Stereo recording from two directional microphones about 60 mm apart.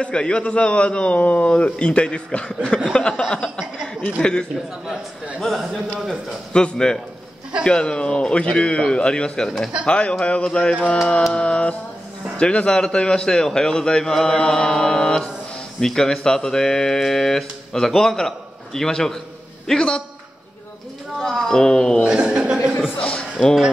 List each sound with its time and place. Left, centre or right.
0.0 s a man's voice: centre
5.4 s speech: centre
6.5 s speech: centre
21.2 s speech: centre
22.0 s speech: centre
23.0 s a sound: centre